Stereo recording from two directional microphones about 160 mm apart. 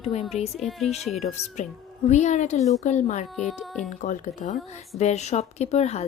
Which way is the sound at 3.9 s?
50° left (ahead or behind).